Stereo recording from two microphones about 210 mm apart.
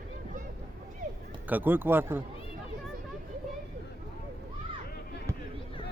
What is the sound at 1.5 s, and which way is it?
Speech, 10° right (ahead or behind).